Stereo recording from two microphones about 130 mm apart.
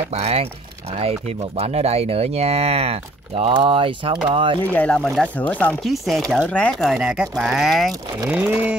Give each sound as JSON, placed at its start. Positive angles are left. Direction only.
{"t": 0.1, "sound": "speech", "side_deg": -55}
{"t": 1.6, "sound": "speech", "side_deg": -55}
{"t": 4.7, "sound": "speech", "side_deg": 10}
{"t": 5.8, "sound": "speech", "side_deg": 0}
{"t": 8.3, "sound": "speech", "side_deg": -10}